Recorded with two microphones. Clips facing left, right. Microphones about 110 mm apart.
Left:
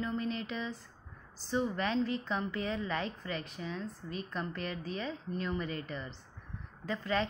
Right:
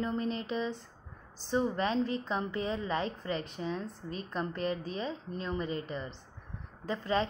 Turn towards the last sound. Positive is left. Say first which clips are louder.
# right 2 dB
turn(degrees=-30)  # may be behind; listen again after turning